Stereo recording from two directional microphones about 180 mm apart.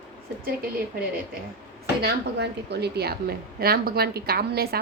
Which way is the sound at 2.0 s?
65° right (ahead or behind).